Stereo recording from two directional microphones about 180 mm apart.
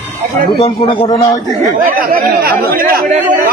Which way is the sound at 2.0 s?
55° right (ahead or behind).